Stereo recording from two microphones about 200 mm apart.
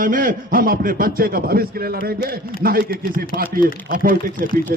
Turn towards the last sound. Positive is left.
turn(degrees=-45)  # may be behind; listen again after turning